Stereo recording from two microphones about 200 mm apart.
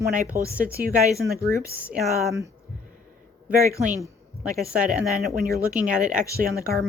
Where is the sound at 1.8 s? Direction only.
10° right (ahead or behind).